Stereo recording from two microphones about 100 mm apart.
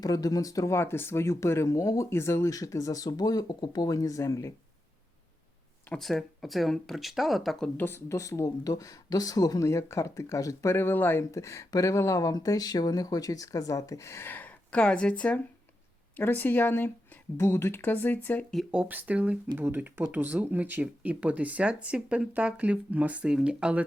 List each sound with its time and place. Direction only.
0.0 s speech: 35° left (ahead or behind)
6.0 s speech: centre (ahead or behind)
7.8 s speech: 25° left (ahead or behind)
18.7 s speech: 15° right (ahead or behind)